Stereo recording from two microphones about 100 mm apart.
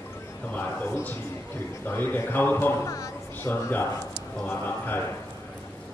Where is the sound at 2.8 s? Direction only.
35° left (ahead or behind).